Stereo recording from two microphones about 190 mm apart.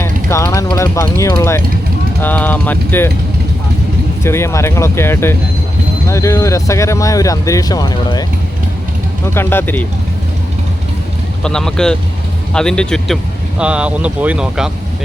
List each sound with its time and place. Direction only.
0.3 s speech: 15° left (ahead or behind)
4.2 s speech: 15° left (ahead or behind)
9.2 s speech: 10° left (ahead or behind)
11.4 s speech: 5° left (ahead or behind)